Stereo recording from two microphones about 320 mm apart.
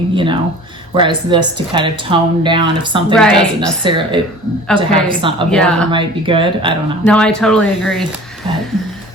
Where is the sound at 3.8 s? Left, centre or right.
Centre.